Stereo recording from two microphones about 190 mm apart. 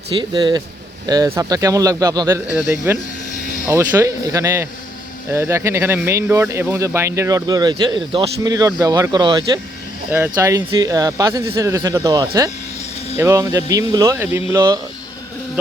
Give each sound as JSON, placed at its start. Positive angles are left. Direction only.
{"t": 0.2, "sound": "speech", "side_deg": -25}
{"t": 2.6, "sound": "speech", "side_deg": 0}
{"t": 3.7, "sound": "speech", "side_deg": -15}